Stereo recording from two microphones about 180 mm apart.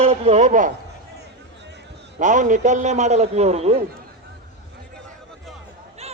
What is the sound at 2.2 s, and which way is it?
A man's voice, 45° right (ahead or behind).